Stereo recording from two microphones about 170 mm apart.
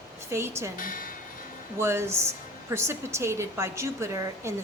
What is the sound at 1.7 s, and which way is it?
A woman's voice, 15° right (ahead or behind).